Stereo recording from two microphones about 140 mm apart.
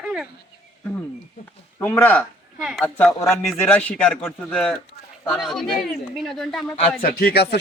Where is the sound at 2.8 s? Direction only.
10° left (ahead or behind).